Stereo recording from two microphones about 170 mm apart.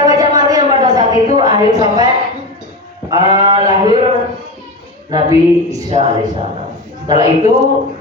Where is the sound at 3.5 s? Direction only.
25° right (ahead or behind).